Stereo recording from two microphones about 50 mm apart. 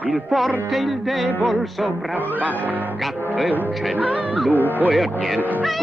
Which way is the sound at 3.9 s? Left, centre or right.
Right.